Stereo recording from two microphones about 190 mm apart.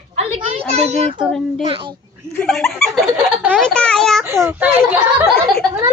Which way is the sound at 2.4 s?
Centre (ahead or behind).